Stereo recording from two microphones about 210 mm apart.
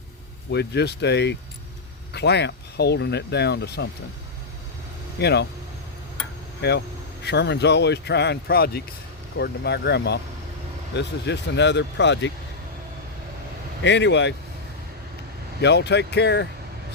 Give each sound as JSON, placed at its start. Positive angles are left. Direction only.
{"t": 0.5, "sound": "speech", "side_deg": 50}
{"t": 5.2, "sound": "speech", "side_deg": 55}
{"t": 6.6, "sound": "speech", "side_deg": 50}
{"t": 13.8, "sound": "speech", "side_deg": 55}
{"t": 15.6, "sound": "speech", "side_deg": 55}